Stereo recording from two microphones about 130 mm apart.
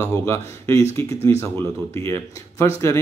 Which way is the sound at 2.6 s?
20° left (ahead or behind).